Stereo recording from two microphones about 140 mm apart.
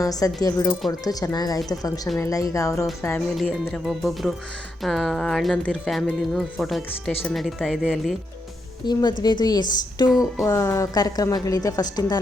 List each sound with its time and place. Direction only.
0.0 s a woman's voice: 25° left (ahead or behind)
3.3 s speech: centre (ahead or behind)
7.1 s speech: 15° left (ahead or behind)
7.3 s speech: centre (ahead or behind)
8.9 s a woman's voice: 30° left (ahead or behind)
10.1 s speech: 5° right (ahead or behind)
10.4 s a woman's voice: 20° left (ahead or behind)